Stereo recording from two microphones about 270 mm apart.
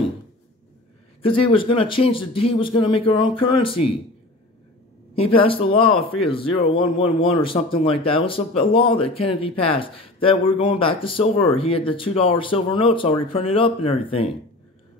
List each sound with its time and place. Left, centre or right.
1.2 s speech: centre
5.1 s speech: centre